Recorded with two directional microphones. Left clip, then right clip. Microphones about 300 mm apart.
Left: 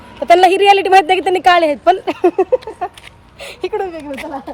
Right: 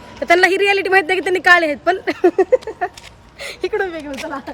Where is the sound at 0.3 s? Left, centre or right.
Centre.